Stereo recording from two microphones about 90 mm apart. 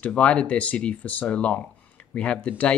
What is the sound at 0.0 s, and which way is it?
Speech, 15° left (ahead or behind).